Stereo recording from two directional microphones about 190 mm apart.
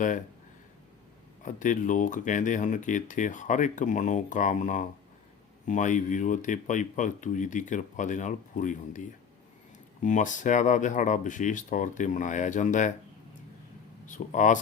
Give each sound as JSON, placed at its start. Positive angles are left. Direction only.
{"t": 1.4, "sound": "speech", "side_deg": 40}
{"t": 14.1, "sound": "speech", "side_deg": 40}